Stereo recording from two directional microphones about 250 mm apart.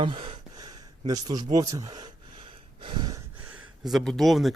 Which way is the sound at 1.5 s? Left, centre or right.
Centre.